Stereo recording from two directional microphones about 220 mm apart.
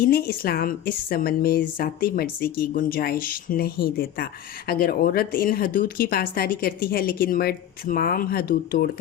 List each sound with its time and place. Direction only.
0.0 s a woman's voice: 45° left (ahead or behind)